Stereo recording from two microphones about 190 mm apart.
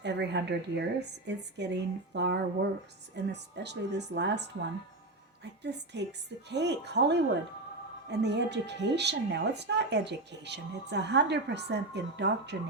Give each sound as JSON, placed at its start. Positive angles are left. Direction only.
{"t": 0.0, "sound": "speech", "side_deg": -65}
{"t": 8.2, "sound": "speech", "side_deg": -65}